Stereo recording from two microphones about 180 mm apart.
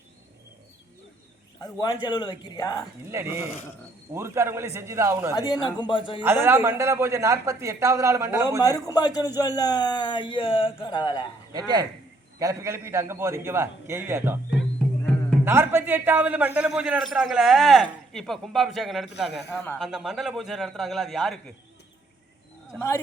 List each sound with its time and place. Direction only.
1.6 s speech: 20° left (ahead or behind)
3.1 s a man's voice: 15° right (ahead or behind)
5.3 s speech: 20° left (ahead or behind)
6.2 s a man's voice: 15° right (ahead or behind)
8.6 s speech: 20° left (ahead or behind)
11.5 s a man's voice: 20° right (ahead or behind)
15.4 s a man's voice: 15° right (ahead or behind)